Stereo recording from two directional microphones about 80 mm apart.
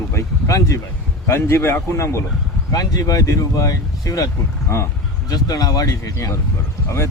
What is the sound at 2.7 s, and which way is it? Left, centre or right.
Speech, left.